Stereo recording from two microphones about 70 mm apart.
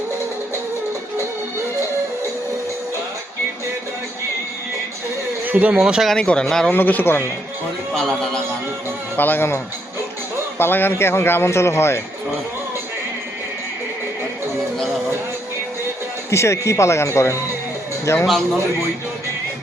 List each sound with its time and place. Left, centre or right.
5.5 s speech: right
5.8 s speech: centre
6.1 s speech: centre
6.7 s speech: left
7.9 s speech: centre
9.1 s speech: left
10.6 s speech: left
16.3 s speech: left